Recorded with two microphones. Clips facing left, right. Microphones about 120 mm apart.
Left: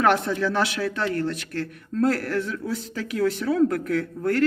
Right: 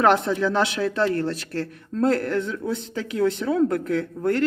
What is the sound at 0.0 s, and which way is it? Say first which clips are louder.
Speech: right 2 dB; 25° right (ahead or behind).